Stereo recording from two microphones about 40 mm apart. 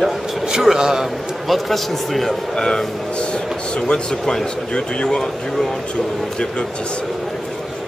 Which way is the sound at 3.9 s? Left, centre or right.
Left.